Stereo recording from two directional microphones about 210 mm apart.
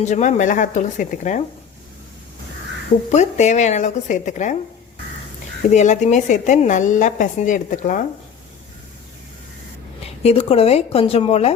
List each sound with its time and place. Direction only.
0.0 s a woman's voice: 35° left (ahead or behind)
3.1 s a woman's voice: 35° left (ahead or behind)
5.6 s a woman's voice: 35° left (ahead or behind)
10.2 s speech: 30° left (ahead or behind)